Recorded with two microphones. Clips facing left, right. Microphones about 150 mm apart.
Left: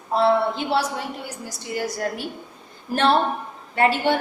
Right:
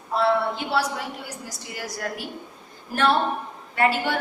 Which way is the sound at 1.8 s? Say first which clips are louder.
Left 5 dB; 30° left (ahead or behind).